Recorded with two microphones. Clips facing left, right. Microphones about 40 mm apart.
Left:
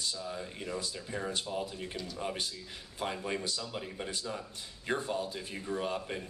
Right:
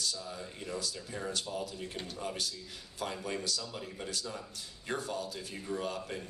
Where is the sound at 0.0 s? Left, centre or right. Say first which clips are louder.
Left 1 dB; left.